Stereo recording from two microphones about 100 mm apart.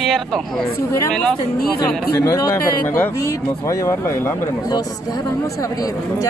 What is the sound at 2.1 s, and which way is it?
Speech, 25° left (ahead or behind).